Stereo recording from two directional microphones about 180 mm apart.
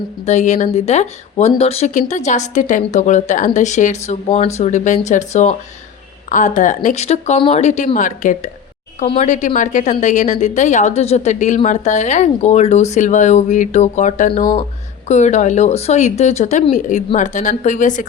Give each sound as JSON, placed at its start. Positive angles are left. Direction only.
{"t": 0.3, "sound": "a woman's voice", "side_deg": 40}